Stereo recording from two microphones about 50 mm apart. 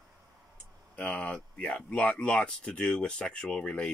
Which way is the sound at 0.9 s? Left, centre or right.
Left.